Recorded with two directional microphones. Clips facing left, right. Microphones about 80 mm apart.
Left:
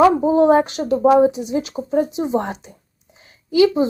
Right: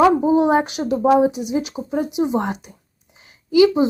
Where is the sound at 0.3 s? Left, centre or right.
Centre.